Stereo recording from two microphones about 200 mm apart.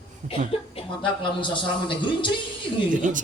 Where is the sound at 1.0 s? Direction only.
25° left (ahead or behind).